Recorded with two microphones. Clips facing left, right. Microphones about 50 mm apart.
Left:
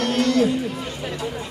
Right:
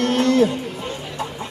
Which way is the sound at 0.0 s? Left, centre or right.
Right.